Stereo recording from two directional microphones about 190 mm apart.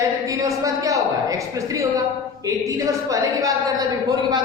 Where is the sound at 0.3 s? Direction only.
15° right (ahead or behind).